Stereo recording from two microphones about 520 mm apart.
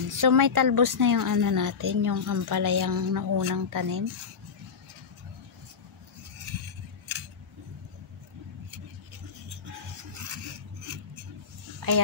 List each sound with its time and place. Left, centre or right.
0.1 s a woman's voice: right
11.8 s speech: right